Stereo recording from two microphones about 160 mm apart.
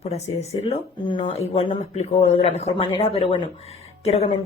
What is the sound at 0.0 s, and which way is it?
A man's voice, 40° left (ahead or behind).